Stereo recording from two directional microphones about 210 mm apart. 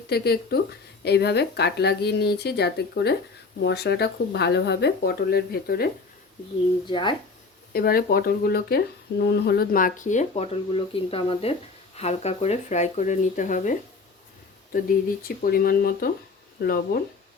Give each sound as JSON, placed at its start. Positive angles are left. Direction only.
{"t": 0.1, "sound": "speech", "side_deg": 50}
{"t": 6.8, "sound": "speech", "side_deg": 20}
{"t": 7.7, "sound": "speech", "side_deg": 45}